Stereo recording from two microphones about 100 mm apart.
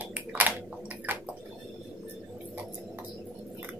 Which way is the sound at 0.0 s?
15° right (ahead or behind).